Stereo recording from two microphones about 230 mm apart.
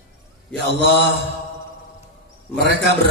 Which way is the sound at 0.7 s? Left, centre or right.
Right.